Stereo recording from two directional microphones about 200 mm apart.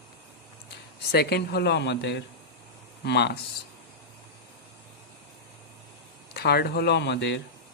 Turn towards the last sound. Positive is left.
turn(degrees=60)  # may be behind; listen again after turning